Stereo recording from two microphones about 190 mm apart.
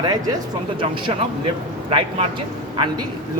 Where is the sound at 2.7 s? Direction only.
25° right (ahead or behind).